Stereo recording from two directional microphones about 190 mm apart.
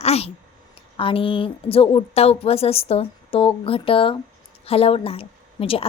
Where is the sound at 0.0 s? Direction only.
35° left (ahead or behind).